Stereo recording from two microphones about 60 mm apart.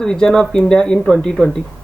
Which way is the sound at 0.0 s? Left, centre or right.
Centre.